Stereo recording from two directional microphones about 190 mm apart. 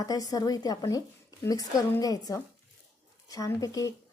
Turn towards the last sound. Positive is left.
turn(degrees=20)  # may be behind; listen again after turning